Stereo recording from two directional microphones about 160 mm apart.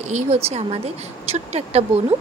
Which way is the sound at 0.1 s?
45° right (ahead or behind).